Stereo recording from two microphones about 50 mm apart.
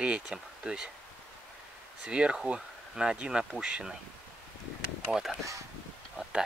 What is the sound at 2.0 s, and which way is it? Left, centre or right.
Speech, right.